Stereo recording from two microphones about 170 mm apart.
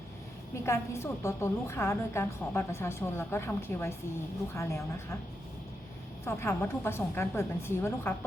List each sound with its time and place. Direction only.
0.5 s a woman's voice: 15° left (ahead or behind)
6.2 s a woman's voice: 15° left (ahead or behind)